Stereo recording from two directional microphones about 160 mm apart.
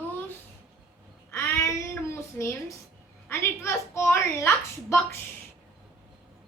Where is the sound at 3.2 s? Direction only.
15° left (ahead or behind).